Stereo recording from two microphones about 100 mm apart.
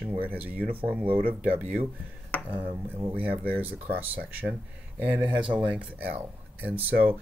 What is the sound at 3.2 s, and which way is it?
Speech, 15° right (ahead or behind).